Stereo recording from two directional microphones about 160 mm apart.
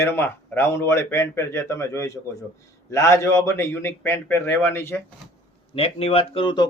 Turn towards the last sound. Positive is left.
turn(degrees=30)  # may be behind; listen again after turning